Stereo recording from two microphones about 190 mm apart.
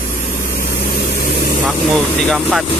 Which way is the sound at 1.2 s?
55° left (ahead or behind).